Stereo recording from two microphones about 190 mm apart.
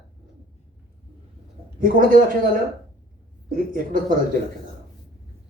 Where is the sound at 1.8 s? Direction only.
45° right (ahead or behind).